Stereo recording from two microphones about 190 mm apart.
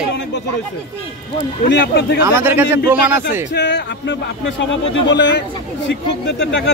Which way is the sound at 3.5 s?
65° left (ahead or behind).